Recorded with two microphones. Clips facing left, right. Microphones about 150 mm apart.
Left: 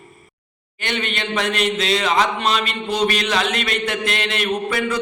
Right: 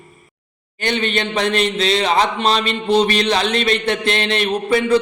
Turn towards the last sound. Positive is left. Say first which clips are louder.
# right 6 dB
turn(degrees=-30)  # may be behind; listen again after turning